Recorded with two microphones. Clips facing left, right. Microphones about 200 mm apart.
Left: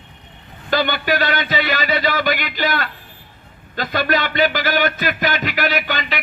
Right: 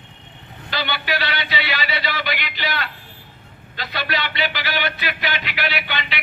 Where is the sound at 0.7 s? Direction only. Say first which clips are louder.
Left 7 dB; 45° left (ahead or behind).